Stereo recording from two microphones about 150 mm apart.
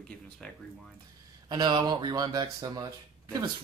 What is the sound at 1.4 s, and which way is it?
Speech, 30° right (ahead or behind).